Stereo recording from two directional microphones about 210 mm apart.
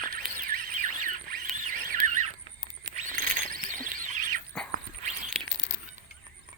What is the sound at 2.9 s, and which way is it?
Rodents, 40° right (ahead or behind).